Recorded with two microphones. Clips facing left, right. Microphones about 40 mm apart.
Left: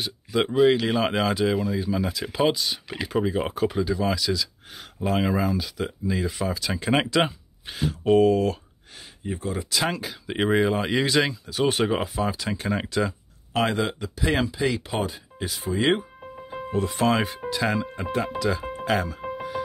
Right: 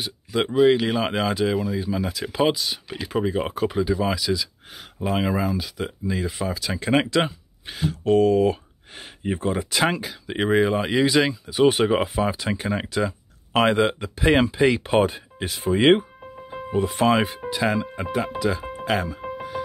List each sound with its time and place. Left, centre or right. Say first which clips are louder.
0.0 s speech: even; centre
9.2 s speech: right 5 dB; right
10.0 s speech: right 1 dB; centre
11.4 s speech: right 5 dB; centre
13.5 s speech: right 5 dB; right
16.2 s music: even; centre
16.7 s speech: right 3 dB; centre
18.4 s music: right 1 dB; centre